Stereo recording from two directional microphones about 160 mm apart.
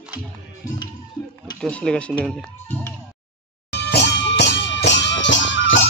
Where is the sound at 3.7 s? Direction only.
90° left.